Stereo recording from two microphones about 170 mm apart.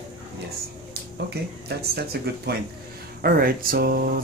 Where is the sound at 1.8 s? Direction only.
70° right (ahead or behind).